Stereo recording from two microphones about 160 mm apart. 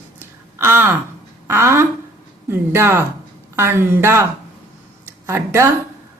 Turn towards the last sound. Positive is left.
turn(degrees=-15)  # may be behind; listen again after turning